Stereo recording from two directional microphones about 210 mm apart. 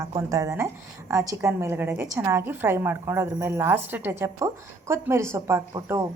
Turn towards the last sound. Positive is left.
turn(degrees=-15)  # may be behind; listen again after turning